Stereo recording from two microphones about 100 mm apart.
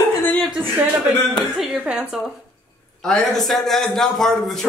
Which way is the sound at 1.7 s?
10° right (ahead or behind).